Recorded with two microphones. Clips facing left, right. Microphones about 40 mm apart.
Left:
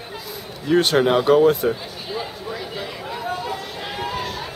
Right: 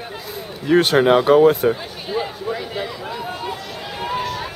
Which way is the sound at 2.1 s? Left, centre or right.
Centre.